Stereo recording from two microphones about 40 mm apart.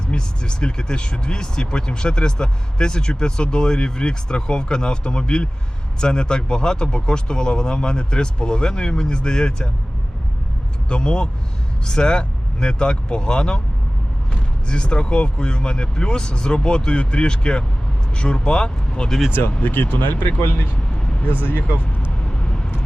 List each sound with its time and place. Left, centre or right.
0.1 s speech: left
10.8 s speech: left
14.7 s speech: left
19.6 s speech: left
20.9 s vehicle: centre
21.2 s speech: left
22.2 s vehicle: centre